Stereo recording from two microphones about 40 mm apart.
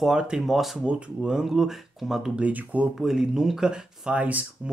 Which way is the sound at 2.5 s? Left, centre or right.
Right.